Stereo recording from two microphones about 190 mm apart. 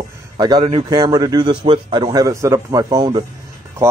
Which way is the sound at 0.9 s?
20° right (ahead or behind).